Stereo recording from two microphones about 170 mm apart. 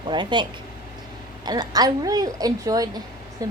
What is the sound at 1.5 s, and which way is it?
A woman's voice, 25° right (ahead or behind).